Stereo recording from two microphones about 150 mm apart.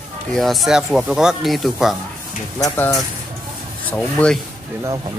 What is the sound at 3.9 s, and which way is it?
Speech, 10° left (ahead or behind).